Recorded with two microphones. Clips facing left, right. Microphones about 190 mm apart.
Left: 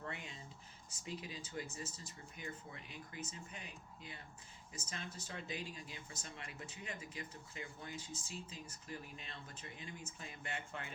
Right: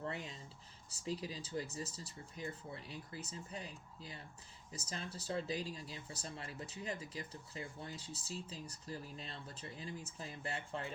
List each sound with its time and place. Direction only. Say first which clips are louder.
0.0 s speech: right 4 dB; 35° right (ahead or behind)